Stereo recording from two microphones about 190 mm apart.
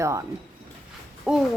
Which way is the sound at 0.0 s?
15° right (ahead or behind).